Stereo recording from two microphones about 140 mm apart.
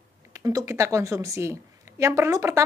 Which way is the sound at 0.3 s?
25° right (ahead or behind).